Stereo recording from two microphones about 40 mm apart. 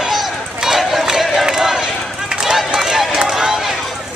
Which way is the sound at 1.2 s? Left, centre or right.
Centre.